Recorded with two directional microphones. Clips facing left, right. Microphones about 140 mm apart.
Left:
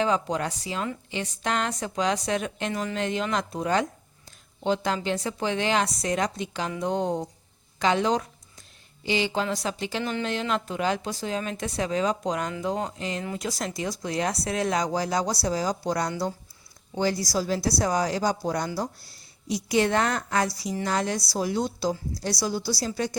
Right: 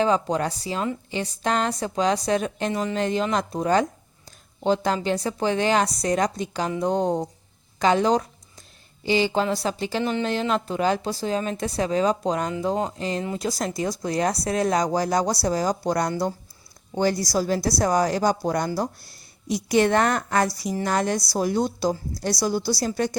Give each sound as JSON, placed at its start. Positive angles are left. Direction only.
{"t": 0.0, "sound": "a woman's voice", "side_deg": -35}
{"t": 4.3, "sound": "a sound", "side_deg": -40}
{"t": 5.0, "sound": "a woman's voice", "side_deg": -35}